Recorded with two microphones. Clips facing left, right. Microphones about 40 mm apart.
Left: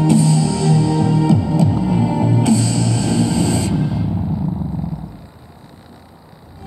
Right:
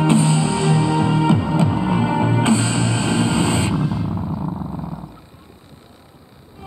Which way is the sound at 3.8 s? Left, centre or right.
Centre.